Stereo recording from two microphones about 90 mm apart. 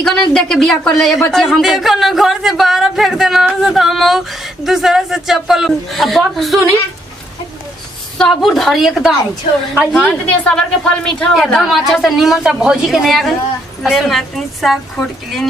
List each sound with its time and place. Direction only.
0.0 s a woman's voice: 5° left (ahead or behind)
8.2 s a woman's voice: centre (ahead or behind)
9.9 s a woman's voice: 15° left (ahead or behind)